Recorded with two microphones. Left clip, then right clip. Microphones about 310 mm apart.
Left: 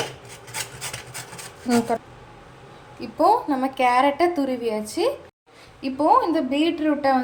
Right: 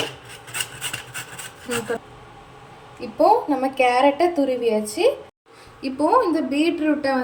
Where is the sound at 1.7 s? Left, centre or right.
Left.